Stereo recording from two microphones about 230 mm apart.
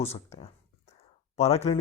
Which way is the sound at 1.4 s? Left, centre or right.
Left.